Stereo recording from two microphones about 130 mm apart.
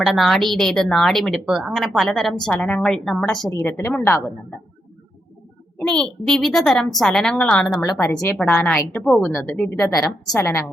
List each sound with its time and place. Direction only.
0.0 s speech: centre (ahead or behind)
3.6 s a woman's voice: 15° left (ahead or behind)
5.8 s speech: 5° left (ahead or behind)
7.8 s a woman's voice: 20° left (ahead or behind)
9.6 s speech: 25° left (ahead or behind)